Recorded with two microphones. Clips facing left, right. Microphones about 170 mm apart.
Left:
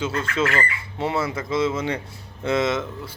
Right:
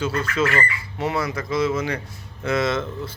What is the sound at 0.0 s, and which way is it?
A man's voice, 25° left (ahead or behind).